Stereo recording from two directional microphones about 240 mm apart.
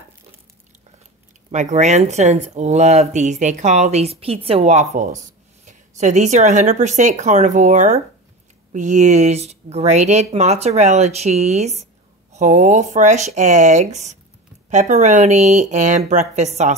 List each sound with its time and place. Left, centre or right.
1.5 s speech: right